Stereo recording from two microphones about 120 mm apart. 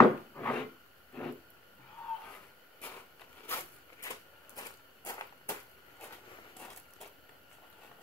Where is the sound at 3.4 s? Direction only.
20° left (ahead or behind).